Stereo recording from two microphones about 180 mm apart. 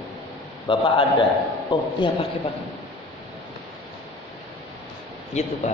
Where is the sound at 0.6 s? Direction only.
30° left (ahead or behind).